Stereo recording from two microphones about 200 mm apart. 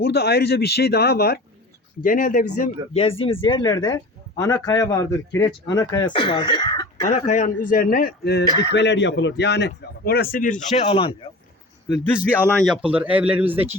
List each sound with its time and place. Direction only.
0.0 s a man's voice: 55° left (ahead or behind)
2.9 s speech: 30° left (ahead or behind)
7.1 s a man's voice: 40° left (ahead or behind)
12.5 s a man's voice: centre (ahead or behind)